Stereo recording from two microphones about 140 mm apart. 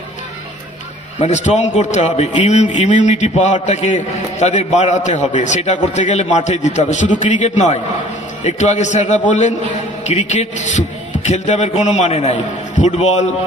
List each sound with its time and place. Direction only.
1.2 s a man's voice: 55° left (ahead or behind)